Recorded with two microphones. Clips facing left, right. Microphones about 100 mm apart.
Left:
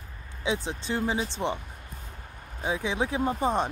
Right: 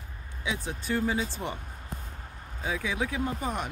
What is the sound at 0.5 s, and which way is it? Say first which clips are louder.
Speech: left 2 dB; 25° left (ahead or behind).